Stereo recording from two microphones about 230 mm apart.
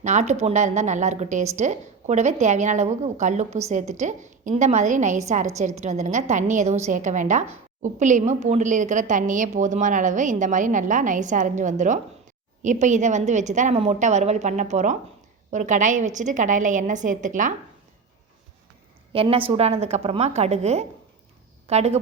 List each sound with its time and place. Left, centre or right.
0.0 s a woman's voice: right
19.1 s a woman's voice: right